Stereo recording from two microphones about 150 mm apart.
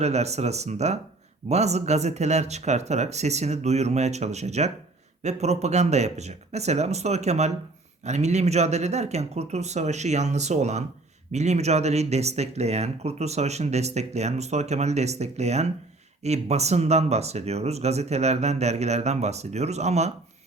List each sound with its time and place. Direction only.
0.0 s speech: 45° right (ahead or behind)